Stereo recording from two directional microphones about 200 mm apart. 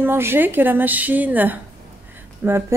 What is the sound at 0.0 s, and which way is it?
Speech, 10° right (ahead or behind).